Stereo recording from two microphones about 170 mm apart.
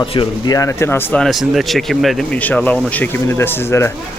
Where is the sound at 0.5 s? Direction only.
15° left (ahead or behind).